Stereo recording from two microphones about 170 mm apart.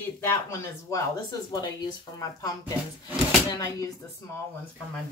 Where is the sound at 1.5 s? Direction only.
25° left (ahead or behind).